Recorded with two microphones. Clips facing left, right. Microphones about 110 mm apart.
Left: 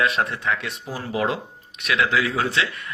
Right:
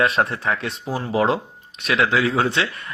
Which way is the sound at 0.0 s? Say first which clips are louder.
Right 3 dB; 35° right (ahead or behind).